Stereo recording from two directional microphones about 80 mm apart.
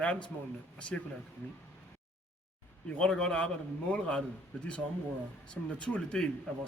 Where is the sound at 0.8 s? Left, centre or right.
Centre.